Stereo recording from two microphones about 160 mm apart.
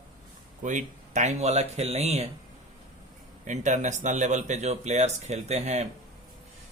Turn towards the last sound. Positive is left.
turn(degrees=-45)  # may be behind; listen again after turning